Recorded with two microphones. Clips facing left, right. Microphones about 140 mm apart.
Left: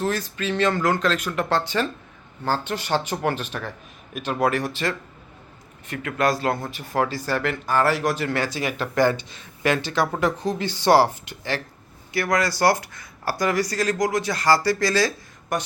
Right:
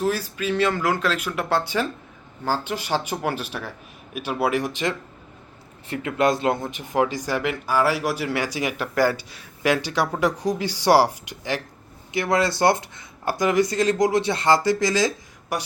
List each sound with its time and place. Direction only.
0.0 s speech: 10° right (ahead or behind)